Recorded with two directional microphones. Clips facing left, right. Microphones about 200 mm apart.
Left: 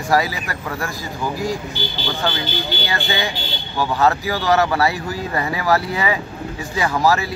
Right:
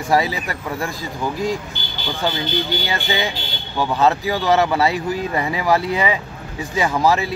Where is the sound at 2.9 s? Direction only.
20° right (ahead or behind).